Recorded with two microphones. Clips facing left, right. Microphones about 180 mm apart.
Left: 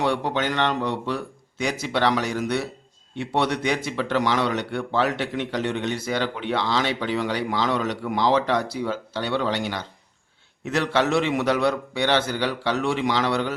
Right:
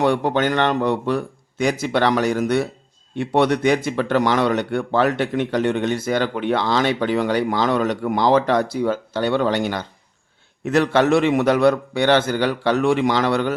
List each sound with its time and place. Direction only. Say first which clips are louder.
0.0 s a man's voice: right 5 dB; 50° right (ahead or behind)